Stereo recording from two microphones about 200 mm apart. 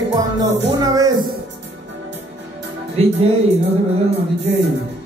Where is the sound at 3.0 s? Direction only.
30° right (ahead or behind).